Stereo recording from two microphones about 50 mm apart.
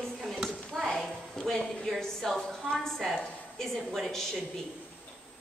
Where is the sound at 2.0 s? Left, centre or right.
Centre.